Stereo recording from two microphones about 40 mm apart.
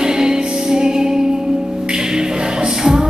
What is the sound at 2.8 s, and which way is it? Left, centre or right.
Music, centre.